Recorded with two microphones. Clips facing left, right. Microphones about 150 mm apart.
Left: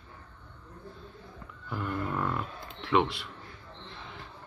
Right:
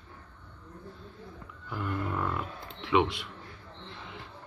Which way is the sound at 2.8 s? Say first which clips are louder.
Even; 15° right (ahead or behind).